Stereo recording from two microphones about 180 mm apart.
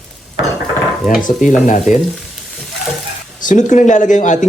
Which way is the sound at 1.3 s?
45° left (ahead or behind).